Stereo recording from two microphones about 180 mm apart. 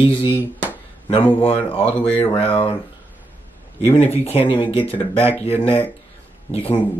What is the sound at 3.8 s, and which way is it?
Speech, 35° left (ahead or behind).